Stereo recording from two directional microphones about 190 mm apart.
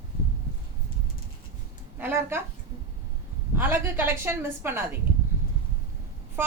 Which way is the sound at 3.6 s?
10° right (ahead or behind).